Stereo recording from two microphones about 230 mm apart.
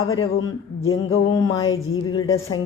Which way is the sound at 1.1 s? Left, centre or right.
Left.